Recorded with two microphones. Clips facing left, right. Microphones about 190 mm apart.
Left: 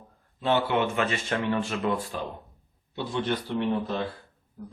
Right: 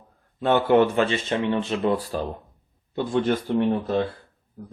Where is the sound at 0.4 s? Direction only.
55° right (ahead or behind).